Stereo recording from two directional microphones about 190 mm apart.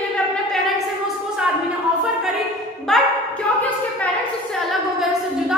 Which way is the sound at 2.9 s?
Centre (ahead or behind).